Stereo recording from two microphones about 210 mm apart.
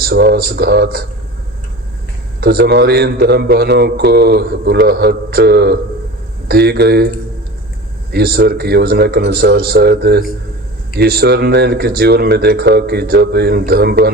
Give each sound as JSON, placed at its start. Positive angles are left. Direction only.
{"t": 0.0, "sound": "speech", "side_deg": -50}
{"t": 2.4, "sound": "speech", "side_deg": -50}
{"t": 8.1, "sound": "speech", "side_deg": -50}